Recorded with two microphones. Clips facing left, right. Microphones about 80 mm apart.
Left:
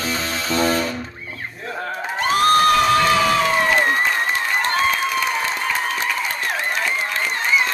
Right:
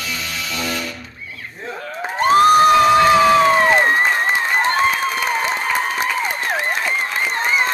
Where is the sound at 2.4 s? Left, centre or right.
Centre.